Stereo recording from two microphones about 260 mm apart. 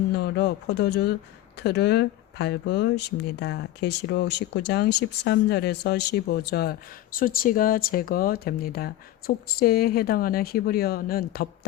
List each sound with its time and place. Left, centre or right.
0.1 s speech: left